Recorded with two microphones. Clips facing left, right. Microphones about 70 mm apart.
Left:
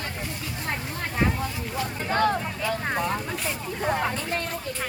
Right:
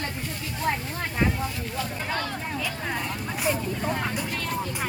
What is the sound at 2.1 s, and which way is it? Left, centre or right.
Vehicle, left.